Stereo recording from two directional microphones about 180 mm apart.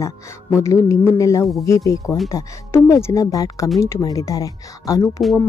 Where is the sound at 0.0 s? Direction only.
15° left (ahead or behind).